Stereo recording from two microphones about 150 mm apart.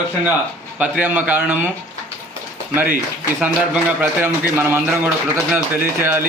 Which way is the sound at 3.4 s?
10° right (ahead or behind).